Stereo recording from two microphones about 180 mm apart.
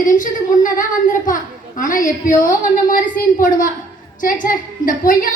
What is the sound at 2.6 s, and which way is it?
A woman's voice, 50° left (ahead or behind).